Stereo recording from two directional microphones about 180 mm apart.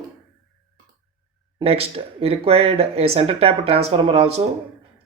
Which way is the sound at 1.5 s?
30° right (ahead or behind).